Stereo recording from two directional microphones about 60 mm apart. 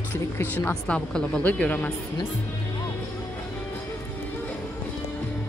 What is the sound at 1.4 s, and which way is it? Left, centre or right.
Speech, left.